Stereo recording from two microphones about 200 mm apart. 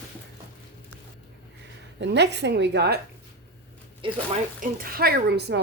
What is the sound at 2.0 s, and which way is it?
Speech, 60° right (ahead or behind).